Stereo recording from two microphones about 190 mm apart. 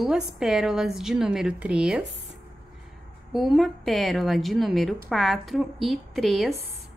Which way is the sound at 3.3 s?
Centre (ahead or behind).